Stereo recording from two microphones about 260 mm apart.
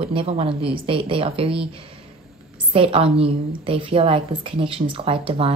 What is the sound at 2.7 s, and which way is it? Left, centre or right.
A woman's voice, right.